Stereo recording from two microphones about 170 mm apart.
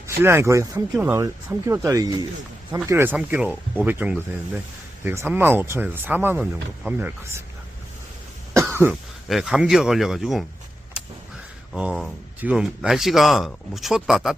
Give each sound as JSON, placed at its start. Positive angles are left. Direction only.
{"t": 0.2, "sound": "speech", "side_deg": -15}
{"t": 8.5, "sound": "cough", "side_deg": -15}
{"t": 9.3, "sound": "speech", "side_deg": -5}
{"t": 11.7, "sound": "speech", "side_deg": -5}